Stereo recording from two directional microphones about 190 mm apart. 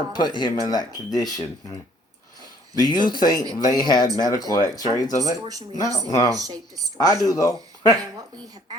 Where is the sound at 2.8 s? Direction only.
25° left (ahead or behind).